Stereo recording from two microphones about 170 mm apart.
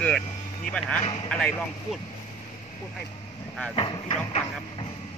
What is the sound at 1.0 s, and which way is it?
Speech, 35° left (ahead or behind).